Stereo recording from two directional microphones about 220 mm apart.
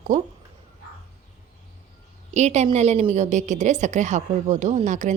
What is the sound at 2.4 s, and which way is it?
A woman's voice, 30° right (ahead or behind).